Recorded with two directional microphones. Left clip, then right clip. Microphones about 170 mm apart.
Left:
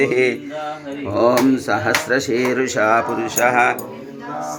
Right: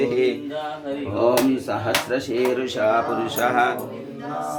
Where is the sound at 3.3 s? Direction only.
10° left (ahead or behind).